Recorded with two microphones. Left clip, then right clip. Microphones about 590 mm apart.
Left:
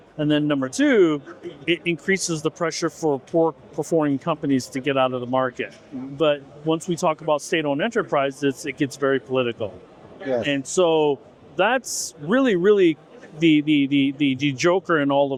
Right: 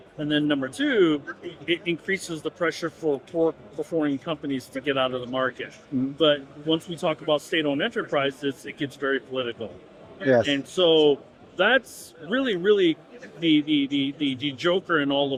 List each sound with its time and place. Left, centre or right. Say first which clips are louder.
0.2 s a man's voice: left 3 dB; left
13.4 s speech: left 4 dB; left